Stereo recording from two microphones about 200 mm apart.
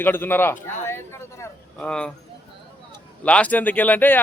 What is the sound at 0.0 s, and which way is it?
A man's voice, 10° left (ahead or behind).